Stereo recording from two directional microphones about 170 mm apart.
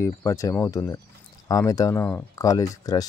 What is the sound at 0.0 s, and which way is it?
Speech, 15° left (ahead or behind).